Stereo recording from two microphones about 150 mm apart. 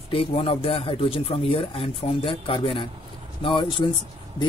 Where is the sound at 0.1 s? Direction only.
35° left (ahead or behind).